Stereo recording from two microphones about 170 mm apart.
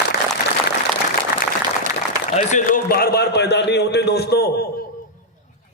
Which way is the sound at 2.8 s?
65° left (ahead or behind).